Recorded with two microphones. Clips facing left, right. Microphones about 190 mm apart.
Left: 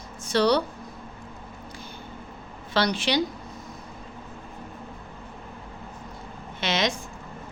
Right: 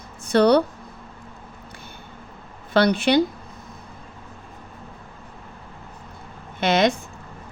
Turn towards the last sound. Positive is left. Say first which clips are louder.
# right 7 dB
turn(degrees=-55)  # may be behind; listen again after turning